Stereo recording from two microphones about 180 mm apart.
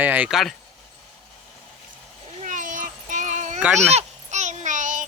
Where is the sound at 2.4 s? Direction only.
45° right (ahead or behind).